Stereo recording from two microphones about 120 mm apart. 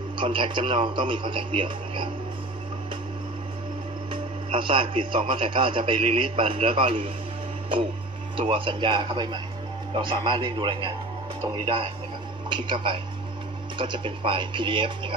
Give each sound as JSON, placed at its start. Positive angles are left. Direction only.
{"t": 0.2, "sound": "a man's voice", "side_deg": -45}
{"t": 4.1, "sound": "a man's voice", "side_deg": -45}
{"t": 8.4, "sound": "a man's voice", "side_deg": -45}